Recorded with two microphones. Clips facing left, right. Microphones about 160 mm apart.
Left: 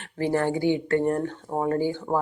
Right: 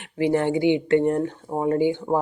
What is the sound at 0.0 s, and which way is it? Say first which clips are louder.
Speech: right 3 dB; 15° right (ahead or behind).